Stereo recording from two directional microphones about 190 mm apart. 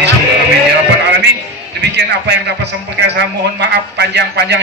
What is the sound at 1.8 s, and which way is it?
A man's voice, 65° right (ahead or behind).